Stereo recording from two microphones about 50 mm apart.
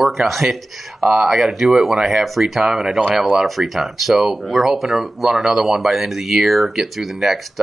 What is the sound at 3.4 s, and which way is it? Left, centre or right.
Speech, centre.